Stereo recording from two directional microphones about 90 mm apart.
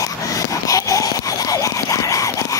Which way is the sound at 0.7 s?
40° left (ahead or behind).